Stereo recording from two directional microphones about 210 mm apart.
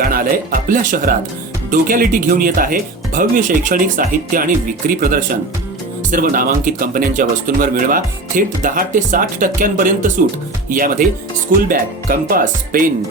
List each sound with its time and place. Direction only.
0.0 s speech: 45° right (ahead or behind)